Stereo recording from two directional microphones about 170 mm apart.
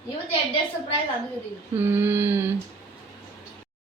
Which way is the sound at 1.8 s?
10° right (ahead or behind).